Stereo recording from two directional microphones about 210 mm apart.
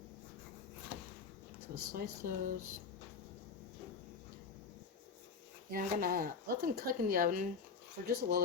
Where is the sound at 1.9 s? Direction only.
40° right (ahead or behind).